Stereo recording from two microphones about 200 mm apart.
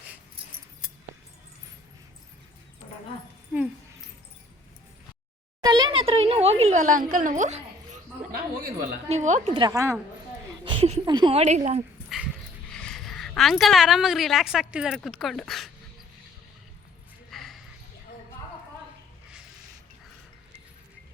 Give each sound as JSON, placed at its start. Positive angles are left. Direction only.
{"t": 5.6, "sound": "a sound", "side_deg": -20}
{"t": 7.1, "sound": "a woman's voice", "side_deg": -40}
{"t": 9.0, "sound": "a woman's voice", "side_deg": -35}
{"t": 9.6, "sound": "a woman's voice", "side_deg": -15}
{"t": 10.6, "sound": "speech", "side_deg": -25}
{"t": 12.0, "sound": "dog", "side_deg": 0}
{"t": 12.7, "sound": "a woman's voice", "side_deg": 5}
{"t": 17.3, "sound": "a sound", "side_deg": 0}